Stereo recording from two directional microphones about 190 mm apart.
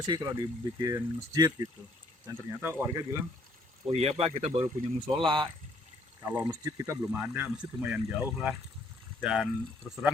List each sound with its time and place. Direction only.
0.0 s speech: 20° right (ahead or behind)
3.8 s speech: 30° right (ahead or behind); by 9.5 s 5° right (ahead or behind)